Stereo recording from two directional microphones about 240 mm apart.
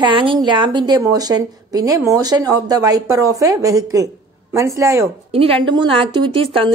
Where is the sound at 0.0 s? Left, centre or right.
Right.